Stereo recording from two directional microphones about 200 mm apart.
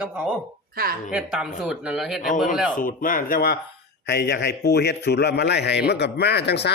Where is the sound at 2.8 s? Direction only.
40° left (ahead or behind).